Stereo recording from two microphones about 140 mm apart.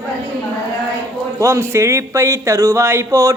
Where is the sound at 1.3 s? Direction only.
20° right (ahead or behind).